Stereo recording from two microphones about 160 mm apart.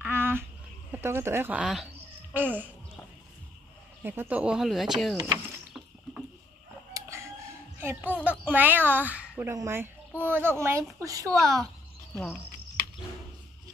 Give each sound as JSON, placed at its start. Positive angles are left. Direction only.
{"t": 0.0, "sound": "a sound", "side_deg": -10}
{"t": 0.9, "sound": "a woman's voice", "side_deg": -15}
{"t": 4.0, "sound": "speech", "side_deg": -15}
{"t": 5.1, "sound": "speech", "side_deg": -20}
{"t": 6.9, "sound": "chicken", "side_deg": -15}
{"t": 7.8, "sound": "a woman's voice", "side_deg": -15}